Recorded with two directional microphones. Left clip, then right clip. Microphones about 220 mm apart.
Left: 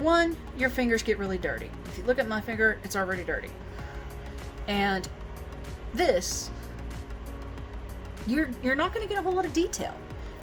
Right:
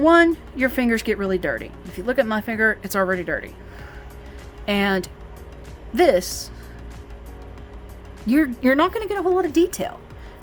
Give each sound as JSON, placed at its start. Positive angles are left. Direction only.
{"t": 0.0, "sound": "speech", "side_deg": -40}
{"t": 4.6, "sound": "speech", "side_deg": -45}
{"t": 8.3, "sound": "speech", "side_deg": -45}